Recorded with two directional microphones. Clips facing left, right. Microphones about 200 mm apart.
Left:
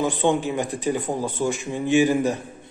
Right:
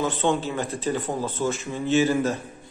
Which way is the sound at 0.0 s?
15° left (ahead or behind).